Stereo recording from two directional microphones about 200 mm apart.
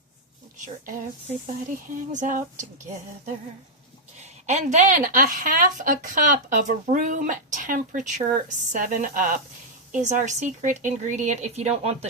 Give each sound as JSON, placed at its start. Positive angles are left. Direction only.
{"t": 0.5, "sound": "a woman's voice", "side_deg": -40}
{"t": 2.0, "sound": "a woman's voice", "side_deg": -40}
{"t": 4.2, "sound": "a woman's voice", "side_deg": -35}